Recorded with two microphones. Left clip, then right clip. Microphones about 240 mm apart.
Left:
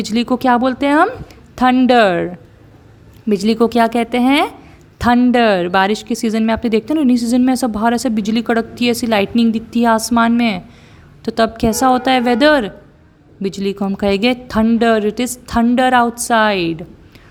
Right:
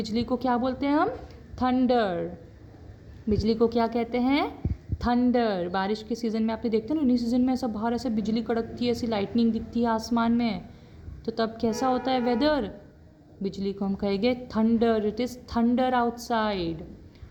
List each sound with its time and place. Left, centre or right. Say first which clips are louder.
0.0 s speech: left 12 dB; left